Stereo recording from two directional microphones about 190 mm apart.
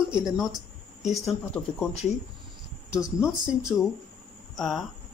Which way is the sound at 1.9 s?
35° left (ahead or behind).